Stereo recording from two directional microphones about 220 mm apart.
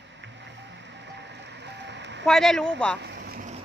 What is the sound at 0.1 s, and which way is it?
Music, 55° right (ahead or behind).